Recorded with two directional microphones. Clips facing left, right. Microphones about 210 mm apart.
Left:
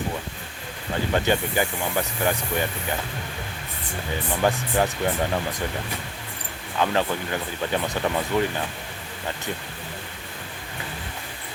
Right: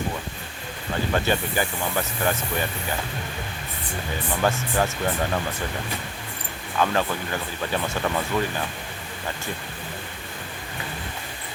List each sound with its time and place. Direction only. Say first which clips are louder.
1.1 s speech: left 2 dB; 20° left (ahead or behind)
4.4 s speech: left 1 dB; 15° left (ahead or behind)
6.7 s speech: even; 20° left (ahead or behind)